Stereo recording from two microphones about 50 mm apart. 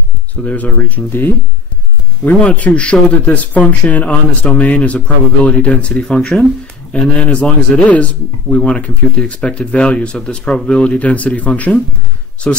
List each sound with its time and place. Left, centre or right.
0.4 s speech: left
2.4 s speech: left